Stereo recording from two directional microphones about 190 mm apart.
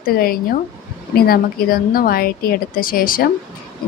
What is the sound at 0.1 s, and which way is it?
A woman's voice, 50° left (ahead or behind).